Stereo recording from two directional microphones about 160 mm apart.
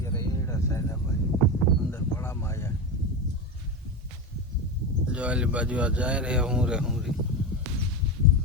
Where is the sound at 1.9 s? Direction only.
15° left (ahead or behind).